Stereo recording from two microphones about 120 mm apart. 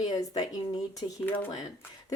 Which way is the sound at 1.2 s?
15° left (ahead or behind).